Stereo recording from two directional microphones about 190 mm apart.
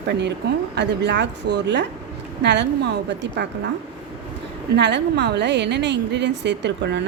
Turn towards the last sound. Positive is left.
turn(degrees=-65)  # may be behind; listen again after turning